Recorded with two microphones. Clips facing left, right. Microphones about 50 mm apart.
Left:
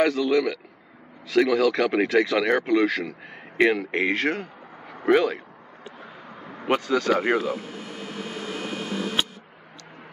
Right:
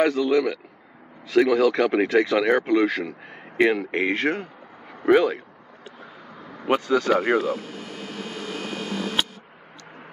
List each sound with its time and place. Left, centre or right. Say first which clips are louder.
0.0 s speech: right 1 dB; centre
6.3 s a sound: right 1 dB; left
6.8 s speech: right 2 dB; centre
7.2 s insect: right 2 dB; centre